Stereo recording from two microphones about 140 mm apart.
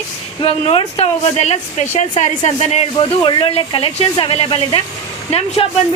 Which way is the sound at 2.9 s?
35° left (ahead or behind).